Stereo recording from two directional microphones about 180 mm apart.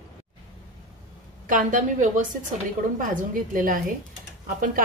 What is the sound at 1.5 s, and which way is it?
Speech, 45° right (ahead or behind).